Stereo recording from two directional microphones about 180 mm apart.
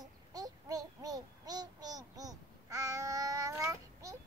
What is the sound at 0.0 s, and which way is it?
Child singing, 20° right (ahead or behind).